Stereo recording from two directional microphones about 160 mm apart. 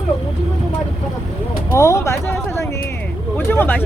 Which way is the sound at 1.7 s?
20° left (ahead or behind).